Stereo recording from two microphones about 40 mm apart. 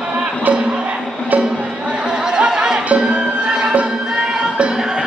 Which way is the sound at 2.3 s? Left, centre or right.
Right.